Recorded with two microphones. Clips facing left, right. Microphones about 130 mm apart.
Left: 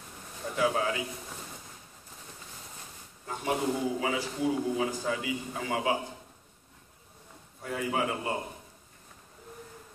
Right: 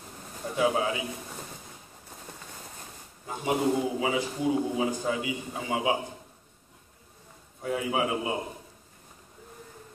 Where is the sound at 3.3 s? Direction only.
15° right (ahead or behind).